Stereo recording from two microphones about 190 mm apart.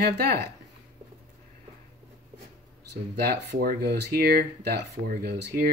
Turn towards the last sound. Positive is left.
turn(degrees=-55)  # may be behind; listen again after turning